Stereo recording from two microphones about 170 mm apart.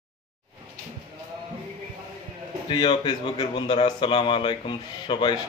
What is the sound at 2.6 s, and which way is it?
A man's voice, 25° left (ahead or behind).